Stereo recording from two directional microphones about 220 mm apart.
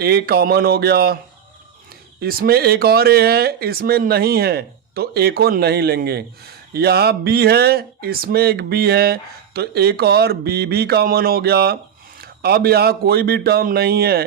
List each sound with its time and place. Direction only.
0.0 s speech: 45° right (ahead or behind)
2.2 s speech: 45° right (ahead or behind)